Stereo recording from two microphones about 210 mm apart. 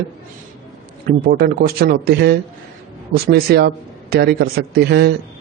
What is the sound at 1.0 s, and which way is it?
A man's voice, 45° right (ahead or behind).